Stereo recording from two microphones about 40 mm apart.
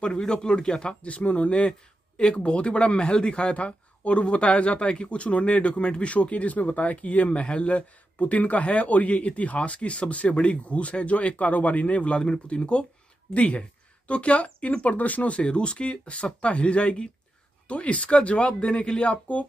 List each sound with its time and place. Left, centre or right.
0.0 s speech: centre
1.0 s speech: left
15.4 s speech: left